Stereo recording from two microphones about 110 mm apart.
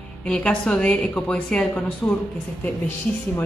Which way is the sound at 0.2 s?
10° left (ahead or behind).